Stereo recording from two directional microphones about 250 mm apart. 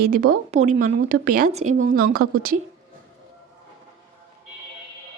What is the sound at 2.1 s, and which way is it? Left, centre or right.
Speech, right.